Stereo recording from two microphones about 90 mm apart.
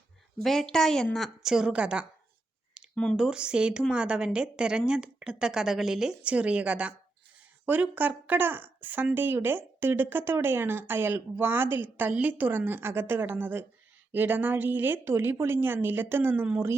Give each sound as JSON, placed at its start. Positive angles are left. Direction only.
{"t": 0.4, "sound": "a woman's voice", "side_deg": 5}
{"t": 2.9, "sound": "speech", "side_deg": 10}
{"t": 3.2, "sound": "speech", "side_deg": -10}